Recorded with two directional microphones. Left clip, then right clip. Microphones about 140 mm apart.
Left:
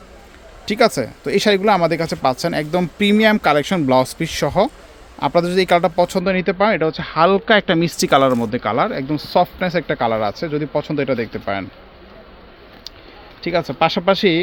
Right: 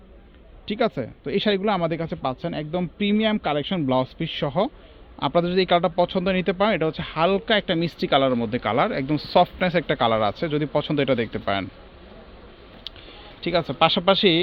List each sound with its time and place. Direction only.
0.6 s speech: 45° left (ahead or behind)
13.4 s speech: 50° left (ahead or behind)